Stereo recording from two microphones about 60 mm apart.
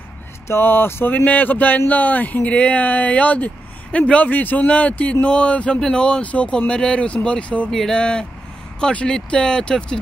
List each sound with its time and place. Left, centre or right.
0.5 s speech: left
1.1 s speech: left
7.7 s speech: centre